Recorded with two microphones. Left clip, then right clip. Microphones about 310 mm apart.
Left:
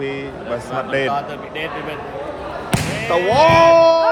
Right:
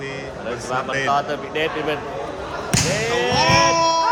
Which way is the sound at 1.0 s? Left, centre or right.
Right.